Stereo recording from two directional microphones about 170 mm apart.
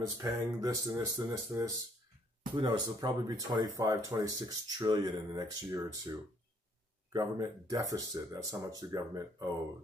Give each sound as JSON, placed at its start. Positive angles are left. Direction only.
{"t": 0.0, "sound": "speech", "side_deg": -20}